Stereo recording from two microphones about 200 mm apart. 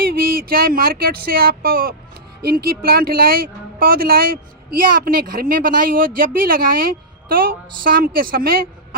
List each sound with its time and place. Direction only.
0.0 s speech: 50° right (ahead or behind)